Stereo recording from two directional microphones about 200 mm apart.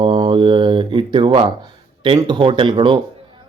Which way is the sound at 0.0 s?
25° right (ahead or behind).